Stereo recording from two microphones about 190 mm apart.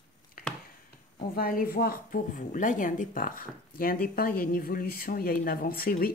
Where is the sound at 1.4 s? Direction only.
50° left (ahead or behind).